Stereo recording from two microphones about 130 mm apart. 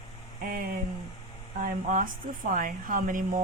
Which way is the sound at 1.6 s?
90° right.